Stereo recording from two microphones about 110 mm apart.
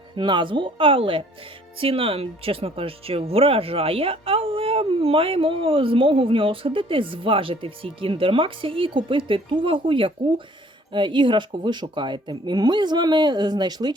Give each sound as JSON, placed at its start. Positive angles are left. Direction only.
{"t": 0.2, "sound": "speech", "side_deg": -45}